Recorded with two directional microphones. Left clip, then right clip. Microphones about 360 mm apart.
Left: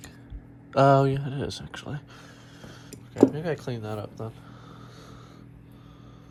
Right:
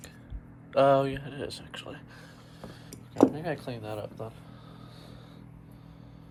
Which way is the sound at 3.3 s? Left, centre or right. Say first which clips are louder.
Left 3 dB; left.